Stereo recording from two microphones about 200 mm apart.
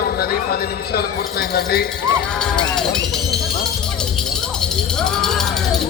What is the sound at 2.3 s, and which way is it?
Speech, 5° left (ahead or behind).